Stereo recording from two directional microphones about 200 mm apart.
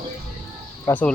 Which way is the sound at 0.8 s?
10° left (ahead or behind).